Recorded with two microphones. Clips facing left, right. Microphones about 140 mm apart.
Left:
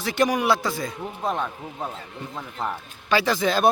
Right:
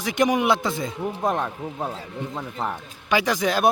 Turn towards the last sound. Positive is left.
turn(degrees=-10)  # may be behind; listen again after turning